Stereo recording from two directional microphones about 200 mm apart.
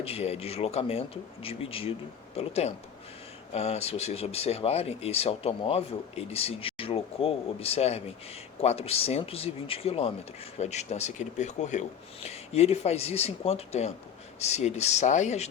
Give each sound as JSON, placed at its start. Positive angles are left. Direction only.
{"t": 0.0, "sound": "speech", "side_deg": 30}